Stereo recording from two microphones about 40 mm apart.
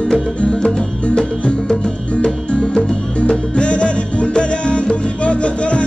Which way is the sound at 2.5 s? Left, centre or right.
Left.